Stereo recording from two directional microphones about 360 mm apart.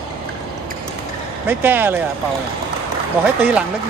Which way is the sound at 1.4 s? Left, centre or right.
Centre.